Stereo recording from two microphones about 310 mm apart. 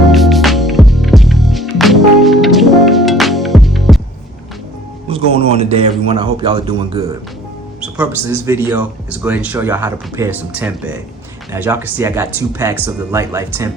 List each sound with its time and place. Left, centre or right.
0.1 s music: centre
5.3 s speech: centre